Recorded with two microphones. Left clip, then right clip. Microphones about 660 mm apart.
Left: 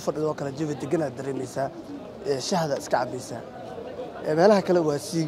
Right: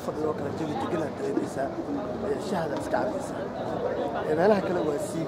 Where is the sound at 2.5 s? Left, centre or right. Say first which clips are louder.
Left 5 dB; left.